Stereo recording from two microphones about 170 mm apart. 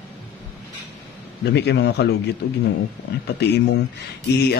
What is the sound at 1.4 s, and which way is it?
Speech, 80° left.